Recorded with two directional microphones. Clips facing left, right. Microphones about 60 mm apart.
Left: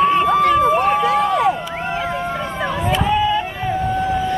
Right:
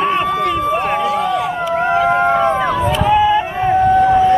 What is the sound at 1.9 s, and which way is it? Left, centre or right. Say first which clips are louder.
Run: right 9 dB; right.